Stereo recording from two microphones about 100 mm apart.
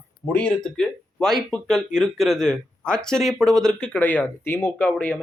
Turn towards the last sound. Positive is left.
turn(degrees=15)  # may be behind; listen again after turning